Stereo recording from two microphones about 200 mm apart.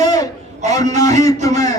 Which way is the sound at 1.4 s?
35° right (ahead or behind).